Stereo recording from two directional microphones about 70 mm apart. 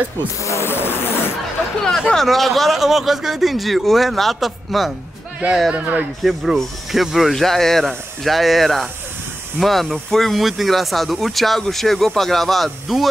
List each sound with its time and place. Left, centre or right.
0.5 s a sound: left
2.0 s speech: centre
5.7 s speech: right
6.2 s speech: centre